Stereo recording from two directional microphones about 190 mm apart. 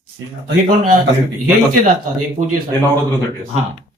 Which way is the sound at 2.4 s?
50° right (ahead or behind).